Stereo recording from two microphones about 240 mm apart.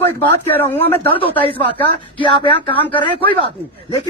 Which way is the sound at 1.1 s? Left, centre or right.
Left.